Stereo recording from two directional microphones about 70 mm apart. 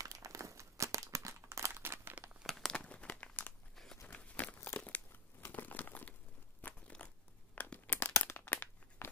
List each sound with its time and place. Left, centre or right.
0.0 s crumpling: right
1.7 s crumpling: right
2.4 s crumpling: centre
2.7 s crumpling: centre
3.7 s crunch: centre
4.1 s crumpling: centre
6.6 s crunch: left
7.0 s zipper: left
7.5 s tearing: left
8.4 s crumpling: left